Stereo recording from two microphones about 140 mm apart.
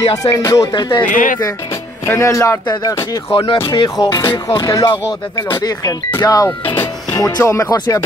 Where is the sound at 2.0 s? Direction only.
20° left (ahead or behind).